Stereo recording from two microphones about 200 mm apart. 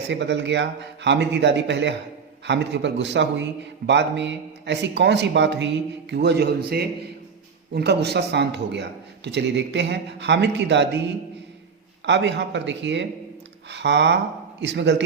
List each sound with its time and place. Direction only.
0.1 s a man's voice: 60° right (ahead or behind)
12.0 s a man's voice: 60° right (ahead or behind)